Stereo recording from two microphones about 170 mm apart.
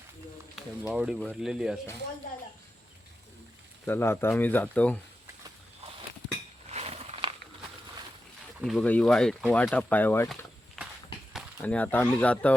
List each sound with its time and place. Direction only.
0.5 s speech: 5° right (ahead or behind)
3.8 s speech: 15° left (ahead or behind)
6.7 s a sound: 35° right (ahead or behind)
8.6 s speech: 5° left (ahead or behind)
11.6 s speech: 10° left (ahead or behind)